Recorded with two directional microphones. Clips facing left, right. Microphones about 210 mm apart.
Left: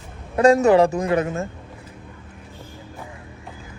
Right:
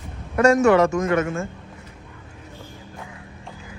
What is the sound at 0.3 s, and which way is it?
A man's voice, 35° left (ahead or behind).